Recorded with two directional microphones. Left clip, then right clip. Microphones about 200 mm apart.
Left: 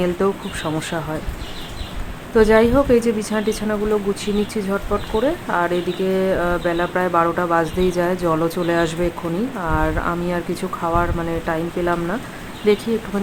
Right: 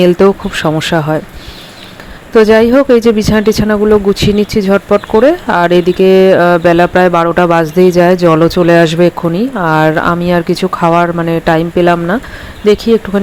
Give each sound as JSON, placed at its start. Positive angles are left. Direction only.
{"t": 0.0, "sound": "speech", "side_deg": -35}
{"t": 2.3, "sound": "speech", "side_deg": -40}